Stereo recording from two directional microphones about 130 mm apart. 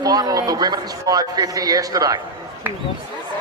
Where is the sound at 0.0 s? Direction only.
30° right (ahead or behind).